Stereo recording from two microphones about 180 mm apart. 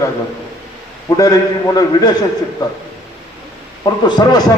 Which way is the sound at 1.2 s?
20° left (ahead or behind).